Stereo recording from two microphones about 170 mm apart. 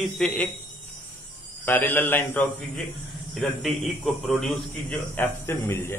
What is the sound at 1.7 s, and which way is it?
Speech, 10° left (ahead or behind).